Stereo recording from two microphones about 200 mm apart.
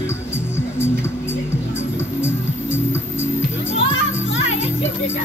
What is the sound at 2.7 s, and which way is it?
Music, 10° left (ahead or behind).